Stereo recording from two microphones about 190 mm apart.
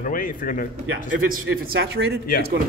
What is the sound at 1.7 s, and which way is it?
Speech, 60° right (ahead or behind).